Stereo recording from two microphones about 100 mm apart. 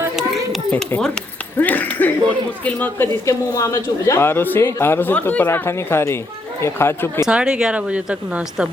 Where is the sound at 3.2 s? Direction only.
30° left (ahead or behind).